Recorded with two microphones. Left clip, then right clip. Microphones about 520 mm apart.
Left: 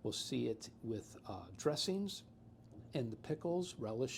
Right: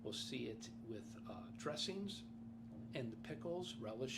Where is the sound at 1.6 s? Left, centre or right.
Left.